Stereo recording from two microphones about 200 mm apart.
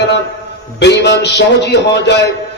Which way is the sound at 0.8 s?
60° left (ahead or behind).